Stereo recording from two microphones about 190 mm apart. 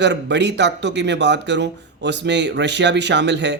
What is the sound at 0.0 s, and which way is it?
Speech, 65° right (ahead or behind).